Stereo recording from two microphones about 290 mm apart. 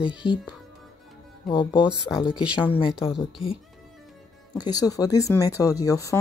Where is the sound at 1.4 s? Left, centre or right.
Centre.